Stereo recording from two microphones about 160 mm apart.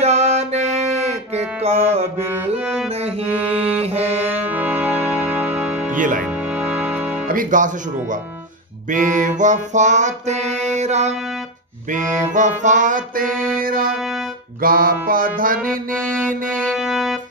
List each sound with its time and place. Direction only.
0.0 s music: 40° right (ahead or behind)
2.6 s music: centre (ahead or behind)
2.9 s music: 40° right (ahead or behind)
4.3 s music: 10° right (ahead or behind)
5.9 s speech: 55° right (ahead or behind)
6.2 s music: 10° right (ahead or behind)
7.2 s music: 55° right (ahead or behind)
13.9 s music: centre (ahead or behind)
14.6 s music: 65° right (ahead or behind)
16.6 s music: centre (ahead or behind)